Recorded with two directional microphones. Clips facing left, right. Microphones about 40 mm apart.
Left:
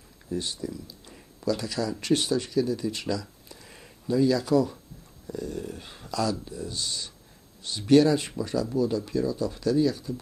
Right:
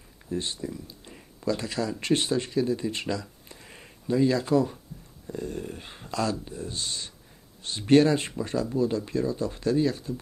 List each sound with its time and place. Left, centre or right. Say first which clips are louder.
0.3 s speech: even; right